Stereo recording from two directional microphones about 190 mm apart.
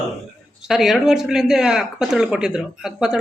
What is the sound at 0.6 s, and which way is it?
Speech, centre (ahead or behind).